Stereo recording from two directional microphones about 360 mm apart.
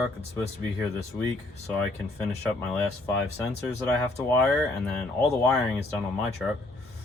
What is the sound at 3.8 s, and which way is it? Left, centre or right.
Speech, centre.